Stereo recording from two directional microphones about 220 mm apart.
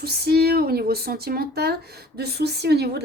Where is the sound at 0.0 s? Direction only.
45° right (ahead or behind).